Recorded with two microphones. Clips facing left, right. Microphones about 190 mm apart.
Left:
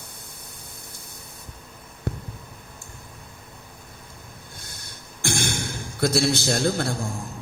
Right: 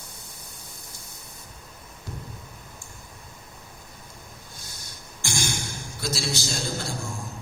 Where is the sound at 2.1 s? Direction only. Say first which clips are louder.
Left 8 dB; 60° left (ahead or behind).